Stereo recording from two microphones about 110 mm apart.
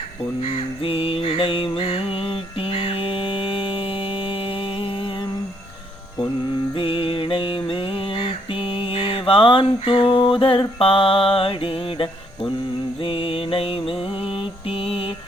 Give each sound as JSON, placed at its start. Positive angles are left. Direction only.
{"t": 0.8, "sound": "music", "side_deg": 60}
{"t": 6.7, "sound": "mantra", "side_deg": 50}